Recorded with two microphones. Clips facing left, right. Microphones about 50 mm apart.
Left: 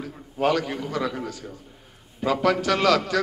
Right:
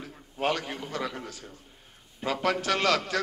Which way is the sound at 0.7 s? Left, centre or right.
Left.